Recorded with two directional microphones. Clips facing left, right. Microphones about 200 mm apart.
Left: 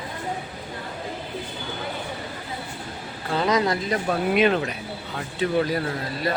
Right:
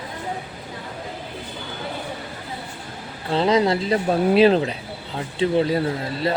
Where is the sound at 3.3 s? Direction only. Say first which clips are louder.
Right 4 dB; 25° right (ahead or behind).